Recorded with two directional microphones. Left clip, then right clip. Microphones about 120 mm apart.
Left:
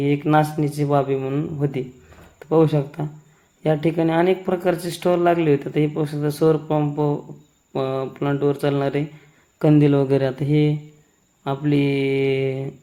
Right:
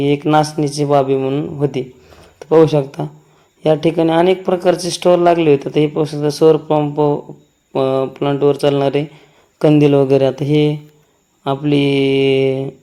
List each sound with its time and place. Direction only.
0.0 s speech: 25° right (ahead or behind)